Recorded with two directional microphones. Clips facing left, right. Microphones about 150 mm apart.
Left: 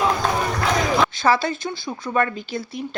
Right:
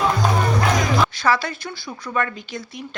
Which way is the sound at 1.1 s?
25° left (ahead or behind).